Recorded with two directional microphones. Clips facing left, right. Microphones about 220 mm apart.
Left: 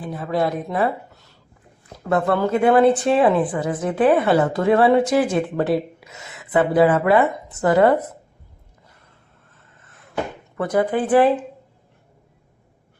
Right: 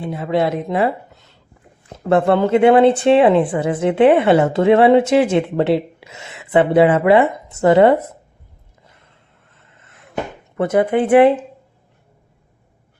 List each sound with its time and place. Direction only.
0.0 s speech: 25° right (ahead or behind)
10.6 s speech: 25° right (ahead or behind)